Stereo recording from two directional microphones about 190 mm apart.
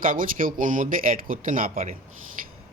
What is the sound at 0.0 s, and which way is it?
Speech, 45° right (ahead or behind).